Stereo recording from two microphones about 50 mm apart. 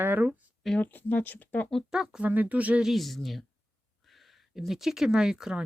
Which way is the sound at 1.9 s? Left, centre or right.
Centre.